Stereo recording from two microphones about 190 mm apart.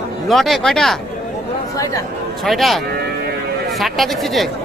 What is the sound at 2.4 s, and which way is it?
Speech, centre (ahead or behind).